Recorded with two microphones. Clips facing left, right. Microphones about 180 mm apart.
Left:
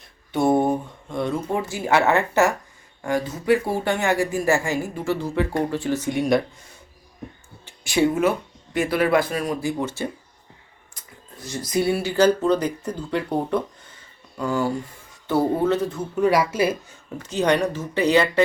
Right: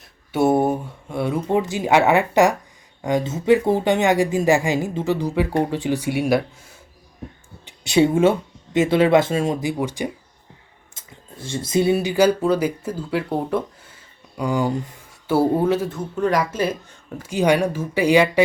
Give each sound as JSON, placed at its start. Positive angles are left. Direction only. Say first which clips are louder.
{"t": 0.0, "sound": "a sound", "louder": "right 2 dB", "side_deg": -5}
{"t": 1.5, "sound": "speech", "louder": "right 4 dB", "side_deg": -20}
{"t": 7.6, "sound": "speech", "louder": "right 3 dB", "side_deg": -20}
{"t": 10.9, "sound": "speech", "louder": "right 3 dB", "side_deg": -25}
{"t": 14.3, "sound": "speech", "louder": "right 2 dB", "side_deg": -15}
{"t": 16.0, "sound": "speech", "louder": "left 1 dB", "side_deg": 10}
{"t": 17.2, "sound": "speech", "louder": "right 2 dB", "side_deg": -10}